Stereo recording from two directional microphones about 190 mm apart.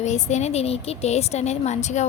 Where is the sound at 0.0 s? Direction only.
35° left (ahead or behind).